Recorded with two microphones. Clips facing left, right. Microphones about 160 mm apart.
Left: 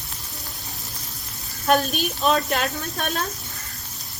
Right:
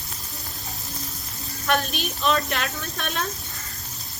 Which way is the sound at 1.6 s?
40° left (ahead or behind).